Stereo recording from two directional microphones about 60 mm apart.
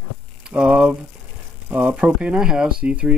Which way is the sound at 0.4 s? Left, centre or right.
Centre.